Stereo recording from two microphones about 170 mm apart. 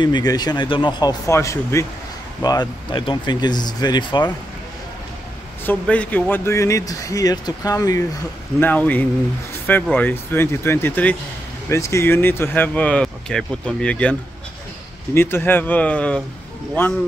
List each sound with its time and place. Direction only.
0.0 s speech: 25° left (ahead or behind)
5.7 s speech: 10° left (ahead or behind)
15.1 s speech: 15° left (ahead or behind)